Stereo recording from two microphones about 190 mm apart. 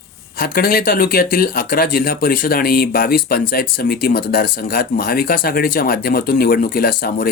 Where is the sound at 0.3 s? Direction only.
50° left (ahead or behind).